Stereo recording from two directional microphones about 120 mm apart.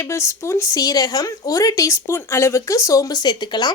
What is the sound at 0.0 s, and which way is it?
Speech, 25° left (ahead or behind).